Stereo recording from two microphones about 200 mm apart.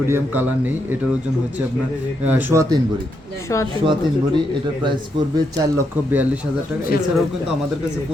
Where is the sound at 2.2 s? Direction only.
10° right (ahead or behind).